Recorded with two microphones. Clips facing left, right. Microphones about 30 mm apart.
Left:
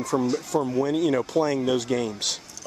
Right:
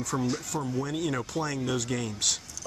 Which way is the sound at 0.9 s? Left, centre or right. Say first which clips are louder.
Left 8 dB; centre.